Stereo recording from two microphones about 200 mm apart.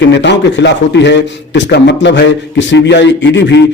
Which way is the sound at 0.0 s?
60° left (ahead or behind).